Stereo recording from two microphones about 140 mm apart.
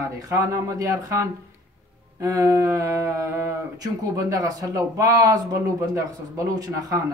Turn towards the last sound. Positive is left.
turn(degrees=-25)  # may be behind; listen again after turning